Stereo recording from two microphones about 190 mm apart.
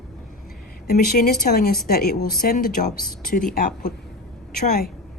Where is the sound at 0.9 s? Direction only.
50° left (ahead or behind).